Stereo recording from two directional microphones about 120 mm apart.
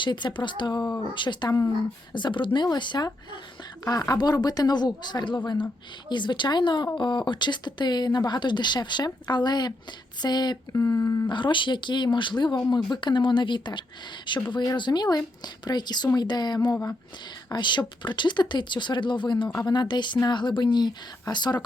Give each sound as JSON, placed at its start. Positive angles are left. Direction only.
{"t": 0.0, "sound": "speech", "side_deg": 40}
{"t": 2.1, "sound": "speech", "side_deg": 40}
{"t": 10.8, "sound": "speech", "side_deg": 25}
{"t": 11.3, "sound": "speech", "side_deg": 40}